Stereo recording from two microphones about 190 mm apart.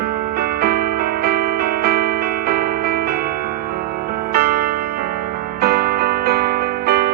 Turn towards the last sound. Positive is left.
turn(degrees=-55)  # may be behind; listen again after turning